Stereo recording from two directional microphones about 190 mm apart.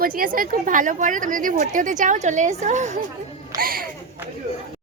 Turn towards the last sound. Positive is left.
turn(degrees=-50)  # may be behind; listen again after turning